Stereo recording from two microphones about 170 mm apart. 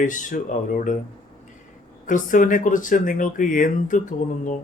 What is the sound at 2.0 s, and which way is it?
Speech, 50° left (ahead or behind).